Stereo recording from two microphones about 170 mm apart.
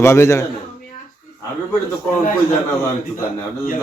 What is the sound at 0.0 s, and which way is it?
Speech, 15° left (ahead or behind).